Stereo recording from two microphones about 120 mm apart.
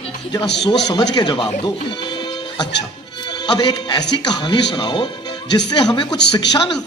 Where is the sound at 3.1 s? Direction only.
40° left (ahead or behind).